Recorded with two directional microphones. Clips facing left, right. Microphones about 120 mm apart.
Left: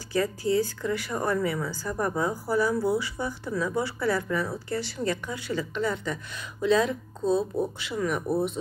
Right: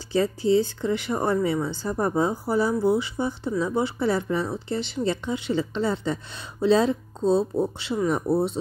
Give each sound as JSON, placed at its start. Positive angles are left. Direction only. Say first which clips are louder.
{"t": 0.1, "sound": "a woman's voice", "louder": "right 4 dB", "side_deg": -25}